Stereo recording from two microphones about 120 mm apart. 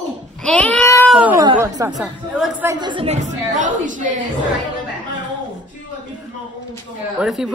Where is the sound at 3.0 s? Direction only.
80° right.